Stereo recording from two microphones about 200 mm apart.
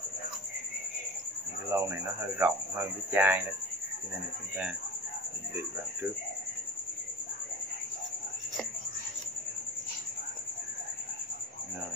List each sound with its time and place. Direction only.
1.7 s speech: 10° right (ahead or behind)